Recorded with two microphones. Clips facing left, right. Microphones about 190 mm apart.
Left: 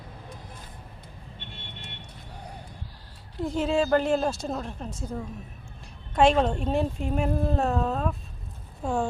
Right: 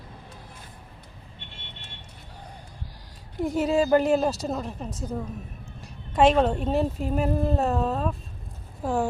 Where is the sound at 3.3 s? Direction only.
10° right (ahead or behind).